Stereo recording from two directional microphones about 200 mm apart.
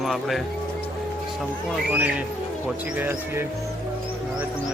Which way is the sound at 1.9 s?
5° right (ahead or behind).